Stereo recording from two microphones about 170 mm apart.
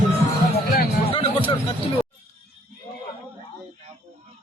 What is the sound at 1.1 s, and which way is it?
Hubbub, 30° left (ahead or behind).